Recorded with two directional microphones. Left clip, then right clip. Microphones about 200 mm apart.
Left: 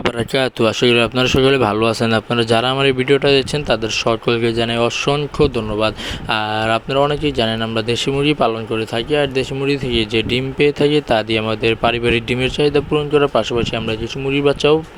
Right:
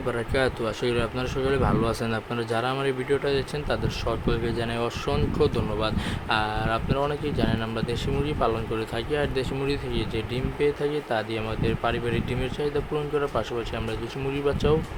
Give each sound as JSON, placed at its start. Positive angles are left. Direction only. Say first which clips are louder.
{"t": 0.3, "sound": "speech", "louder": "left 10 dB", "side_deg": 45}